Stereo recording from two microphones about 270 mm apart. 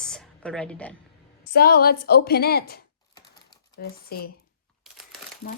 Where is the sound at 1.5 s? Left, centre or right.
Left.